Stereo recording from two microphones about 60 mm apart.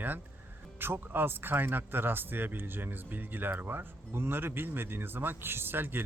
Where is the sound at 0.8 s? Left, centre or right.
Right.